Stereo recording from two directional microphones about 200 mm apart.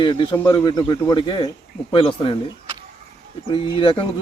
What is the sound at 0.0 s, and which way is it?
Speech, 25° left (ahead or behind).